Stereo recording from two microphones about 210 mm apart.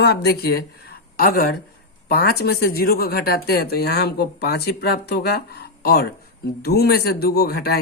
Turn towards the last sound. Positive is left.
turn(degrees=50)  # may be behind; listen again after turning